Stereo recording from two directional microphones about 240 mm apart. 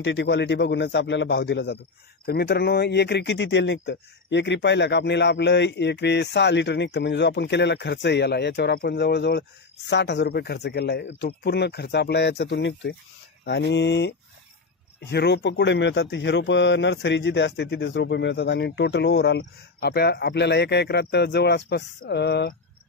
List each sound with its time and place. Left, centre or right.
0.0 s speech: left